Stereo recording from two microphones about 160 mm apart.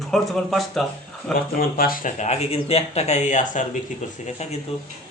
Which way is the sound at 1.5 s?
65° left (ahead or behind).